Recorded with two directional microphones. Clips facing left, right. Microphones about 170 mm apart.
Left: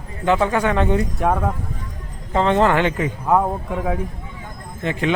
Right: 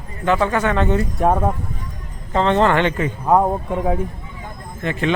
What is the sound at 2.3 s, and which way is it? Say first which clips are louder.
Speech: even; 10° left (ahead or behind).